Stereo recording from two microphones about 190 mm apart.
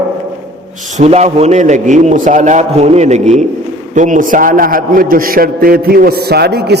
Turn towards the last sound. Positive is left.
turn(degrees=-60)  # may be behind; listen again after turning